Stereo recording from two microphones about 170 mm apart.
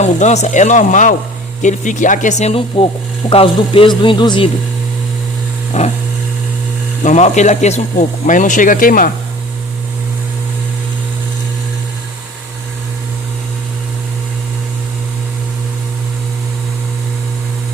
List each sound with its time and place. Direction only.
0.0 s speech: 40° left (ahead or behind)
5.7 s a sound: 40° left (ahead or behind)
7.0 s speech: 45° left (ahead or behind)